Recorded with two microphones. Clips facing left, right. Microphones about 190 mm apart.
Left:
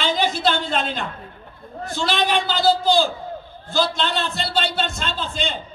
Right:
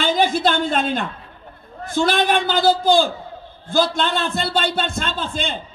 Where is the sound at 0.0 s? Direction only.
50° right (ahead or behind).